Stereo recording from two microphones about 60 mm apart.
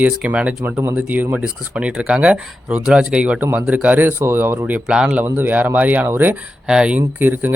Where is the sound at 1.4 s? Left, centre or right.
Centre.